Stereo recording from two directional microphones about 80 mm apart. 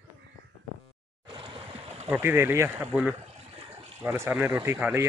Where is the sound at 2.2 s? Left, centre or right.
Right.